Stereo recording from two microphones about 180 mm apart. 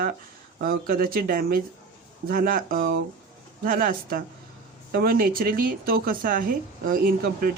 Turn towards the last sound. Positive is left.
turn(degrees=-55)  # may be behind; listen again after turning